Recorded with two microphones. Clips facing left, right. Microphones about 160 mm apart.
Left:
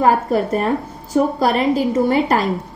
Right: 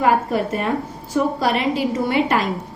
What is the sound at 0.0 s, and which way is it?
A woman's voice, 40° left (ahead or behind).